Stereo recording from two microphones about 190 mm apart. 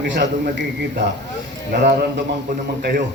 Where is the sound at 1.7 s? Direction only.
60° right (ahead or behind).